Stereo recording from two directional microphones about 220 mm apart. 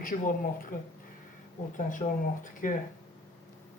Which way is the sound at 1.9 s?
35° left (ahead or behind).